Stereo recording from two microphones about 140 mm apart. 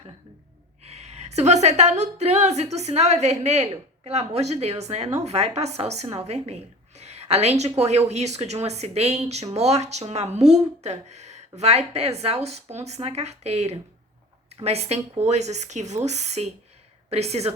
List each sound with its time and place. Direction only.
0.9 s a woman's voice: 50° right (ahead or behind)